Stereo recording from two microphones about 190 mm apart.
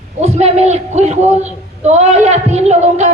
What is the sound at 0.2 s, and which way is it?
A man's voice, 35° right (ahead or behind).